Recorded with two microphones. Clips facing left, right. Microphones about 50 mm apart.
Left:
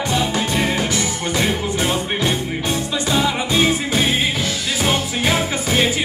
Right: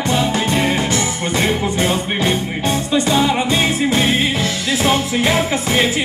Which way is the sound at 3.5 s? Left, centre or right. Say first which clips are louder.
Right 1 dB; right.